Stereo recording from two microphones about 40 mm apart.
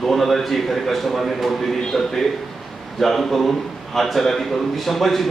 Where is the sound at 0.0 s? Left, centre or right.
Centre.